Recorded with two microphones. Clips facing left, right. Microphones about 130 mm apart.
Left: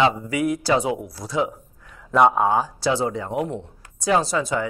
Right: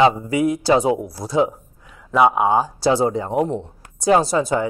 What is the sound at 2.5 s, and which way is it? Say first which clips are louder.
Speech: right 4 dB; 30° right (ahead or behind).